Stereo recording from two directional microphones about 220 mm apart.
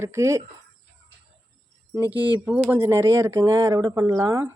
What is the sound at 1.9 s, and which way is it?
Speech, 10° right (ahead or behind).